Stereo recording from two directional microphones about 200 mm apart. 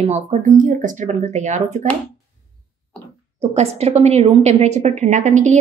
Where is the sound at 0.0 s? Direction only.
35° right (ahead or behind).